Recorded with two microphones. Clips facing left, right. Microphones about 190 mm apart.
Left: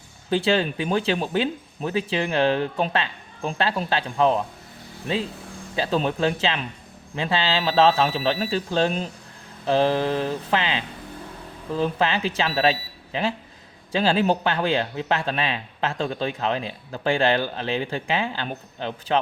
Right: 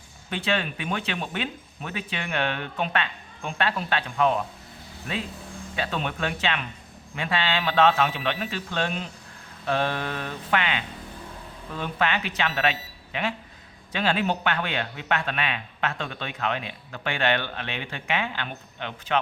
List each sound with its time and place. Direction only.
0.3 s a man's voice: 30° left (ahead or behind)
9.6 s mantra: 30° left (ahead or behind)
11.7 s a man's voice: 30° left (ahead or behind)